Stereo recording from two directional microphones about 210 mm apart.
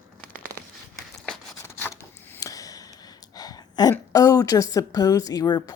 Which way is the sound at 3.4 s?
20° left (ahead or behind).